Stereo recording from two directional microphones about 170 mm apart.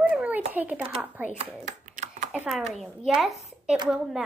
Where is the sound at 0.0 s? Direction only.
10° right (ahead or behind).